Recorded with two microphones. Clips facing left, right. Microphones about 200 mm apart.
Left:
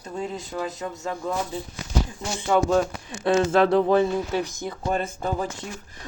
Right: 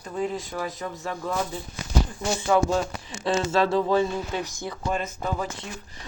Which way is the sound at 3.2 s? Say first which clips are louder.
Left 4 dB; 55° left (ahead or behind).